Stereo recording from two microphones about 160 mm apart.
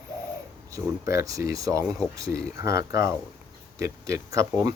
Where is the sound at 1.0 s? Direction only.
20° right (ahead or behind).